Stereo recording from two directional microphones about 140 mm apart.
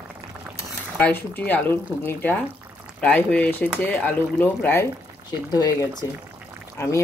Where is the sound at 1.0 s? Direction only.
15° left (ahead or behind).